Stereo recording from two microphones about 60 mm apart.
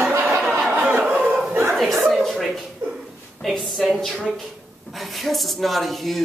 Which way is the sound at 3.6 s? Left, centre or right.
Centre.